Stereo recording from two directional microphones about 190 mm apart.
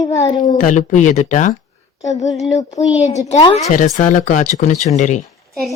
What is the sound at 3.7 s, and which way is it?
Speech, 40° left (ahead or behind).